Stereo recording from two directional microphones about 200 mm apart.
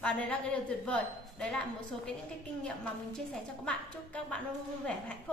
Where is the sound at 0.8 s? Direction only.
5° left (ahead or behind).